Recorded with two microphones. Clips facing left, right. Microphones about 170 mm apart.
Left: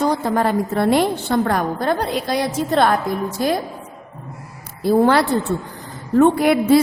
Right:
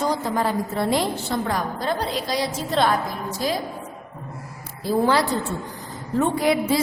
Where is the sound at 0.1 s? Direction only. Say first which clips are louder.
Left 4 dB; 60° left (ahead or behind).